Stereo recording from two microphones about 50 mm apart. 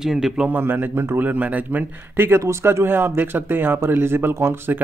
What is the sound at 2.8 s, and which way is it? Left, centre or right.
Speech, right.